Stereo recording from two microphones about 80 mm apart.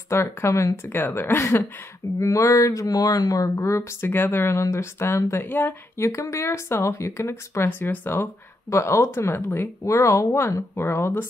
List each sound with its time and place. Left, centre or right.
0.1 s speech: left
0.8 s a woman's voice: left
2.1 s speech: left
3.4 s speech: left
5.9 s speech: left
8.6 s speech: left